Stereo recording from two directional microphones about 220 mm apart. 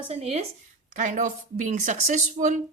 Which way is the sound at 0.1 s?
30° right (ahead or behind).